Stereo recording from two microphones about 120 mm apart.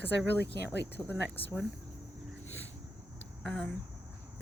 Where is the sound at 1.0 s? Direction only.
Centre (ahead or behind).